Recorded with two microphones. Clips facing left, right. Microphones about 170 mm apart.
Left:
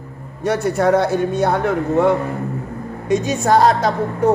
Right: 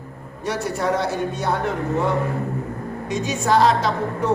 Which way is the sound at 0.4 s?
55° left (ahead or behind).